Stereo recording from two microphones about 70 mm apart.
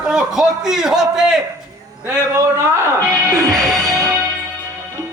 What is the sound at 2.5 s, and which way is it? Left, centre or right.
Speech, right.